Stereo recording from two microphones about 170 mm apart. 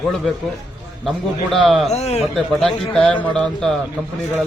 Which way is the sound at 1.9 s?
40° left (ahead or behind).